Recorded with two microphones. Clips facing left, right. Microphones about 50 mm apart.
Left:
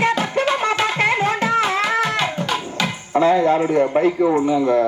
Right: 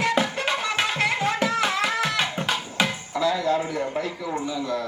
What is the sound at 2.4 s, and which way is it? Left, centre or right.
Music, centre.